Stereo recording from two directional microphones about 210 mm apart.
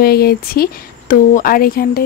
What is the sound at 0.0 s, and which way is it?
Speech, 45° left (ahead or behind).